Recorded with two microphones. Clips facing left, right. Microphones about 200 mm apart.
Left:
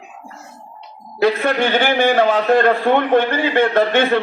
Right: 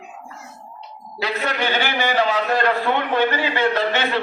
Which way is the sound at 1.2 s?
50° left (ahead or behind).